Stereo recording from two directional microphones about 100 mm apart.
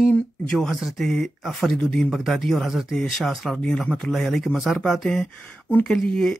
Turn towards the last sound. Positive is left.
turn(degrees=5)  # may be behind; listen again after turning